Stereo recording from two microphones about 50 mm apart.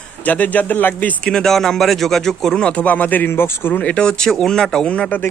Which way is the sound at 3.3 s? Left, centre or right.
Left.